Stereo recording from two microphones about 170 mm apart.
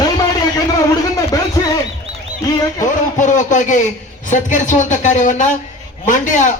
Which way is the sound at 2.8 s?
50° left (ahead or behind).